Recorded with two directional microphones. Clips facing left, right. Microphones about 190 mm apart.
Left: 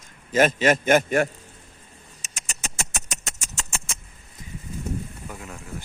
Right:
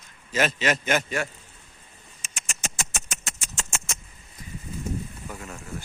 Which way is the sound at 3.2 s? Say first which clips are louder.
Left 1 dB; 40° left (ahead or behind).